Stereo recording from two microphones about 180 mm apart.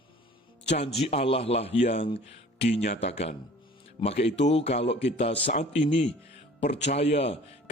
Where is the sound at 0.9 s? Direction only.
35° left (ahead or behind).